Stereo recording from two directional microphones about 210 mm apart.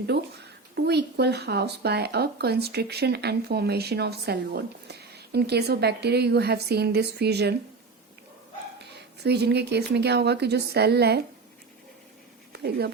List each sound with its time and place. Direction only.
0.9 s speech: 50° right (ahead or behind)
9.2 s speech: 50° right (ahead or behind)
12.5 s speech: 50° right (ahead or behind)